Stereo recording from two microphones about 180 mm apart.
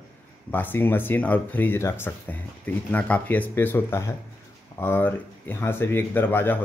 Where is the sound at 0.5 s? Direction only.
10° left (ahead or behind).